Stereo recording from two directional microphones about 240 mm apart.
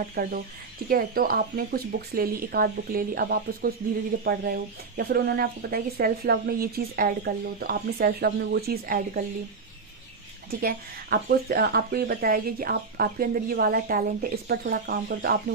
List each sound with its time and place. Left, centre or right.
0.1 s speech: right
10.6 s speech: right